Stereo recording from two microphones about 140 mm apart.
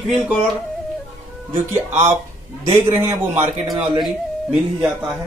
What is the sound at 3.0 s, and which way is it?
Speech, 20° right (ahead or behind).